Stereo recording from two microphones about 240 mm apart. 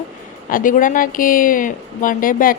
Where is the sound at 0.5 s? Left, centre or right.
Left.